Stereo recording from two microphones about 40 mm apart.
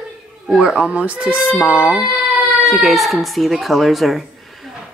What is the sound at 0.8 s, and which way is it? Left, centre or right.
Speech, right.